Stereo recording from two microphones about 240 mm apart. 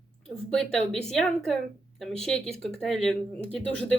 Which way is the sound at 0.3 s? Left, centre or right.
Centre.